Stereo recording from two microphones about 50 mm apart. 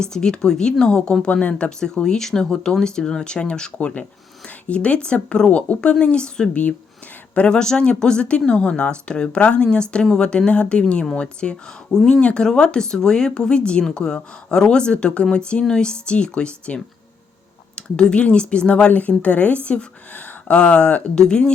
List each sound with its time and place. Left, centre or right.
0.0 s speech: centre
1.8 s speech: centre
3.8 s speech: left
4.4 s a sound: left
5.0 s speech: centre
18.9 s speech: left